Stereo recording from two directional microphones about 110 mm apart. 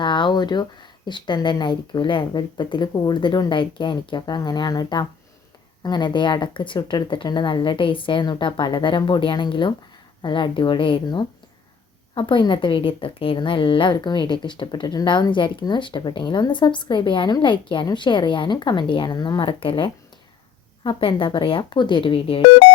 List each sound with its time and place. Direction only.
0.0 s a woman's voice: 45° left (ahead or behind)
19.4 s a woman's voice: 55° left (ahead or behind)